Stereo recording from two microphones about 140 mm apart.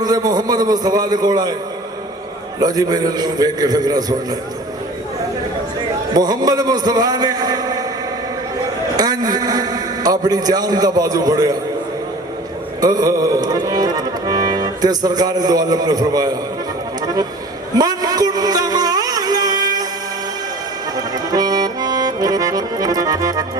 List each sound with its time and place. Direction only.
0.0 s a man's voice: 30° right (ahead or behind)
2.6 s a man's voice: 30° right (ahead or behind)
6.1 s a man's voice: 30° right (ahead or behind)
9.0 s a man's voice: 30° right (ahead or behind)
12.8 s music: 25° right (ahead or behind)
17.7 s a sound: 30° right (ahead or behind)
20.9 s accordion: 30° right (ahead or behind)